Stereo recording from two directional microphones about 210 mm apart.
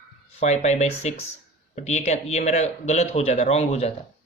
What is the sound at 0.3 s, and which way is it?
Speech, 30° left (ahead or behind).